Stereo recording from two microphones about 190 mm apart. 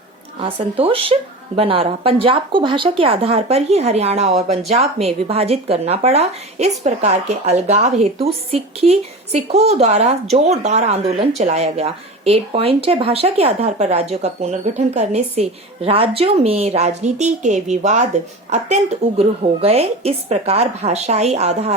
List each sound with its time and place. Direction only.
0.3 s a woman's voice: 30° right (ahead or behind)